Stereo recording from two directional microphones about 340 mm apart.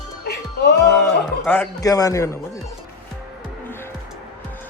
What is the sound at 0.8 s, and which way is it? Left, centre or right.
Speech, centre.